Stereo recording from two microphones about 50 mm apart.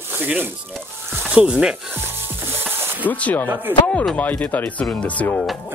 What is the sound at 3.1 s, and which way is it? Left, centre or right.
Speech, left.